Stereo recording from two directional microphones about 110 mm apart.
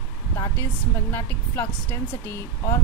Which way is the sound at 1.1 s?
20° left (ahead or behind).